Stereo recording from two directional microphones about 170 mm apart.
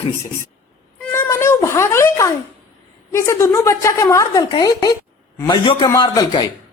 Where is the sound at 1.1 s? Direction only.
15° left (ahead or behind).